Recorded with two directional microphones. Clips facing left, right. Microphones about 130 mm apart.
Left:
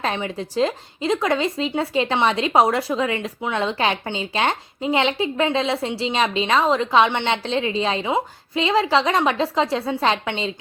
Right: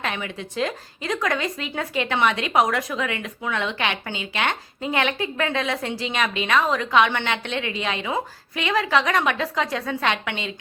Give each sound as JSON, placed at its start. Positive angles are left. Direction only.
{"t": 0.0, "sound": "speech", "side_deg": 30}